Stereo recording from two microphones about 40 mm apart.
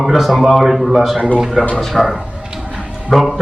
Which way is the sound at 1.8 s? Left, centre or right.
Centre.